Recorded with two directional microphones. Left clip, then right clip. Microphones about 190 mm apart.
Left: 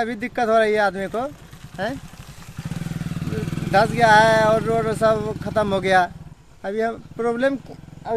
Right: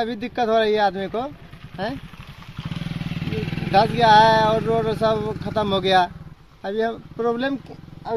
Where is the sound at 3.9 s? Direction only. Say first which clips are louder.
Even; 10° left (ahead or behind).